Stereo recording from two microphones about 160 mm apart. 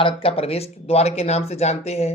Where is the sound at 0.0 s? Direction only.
35° left (ahead or behind).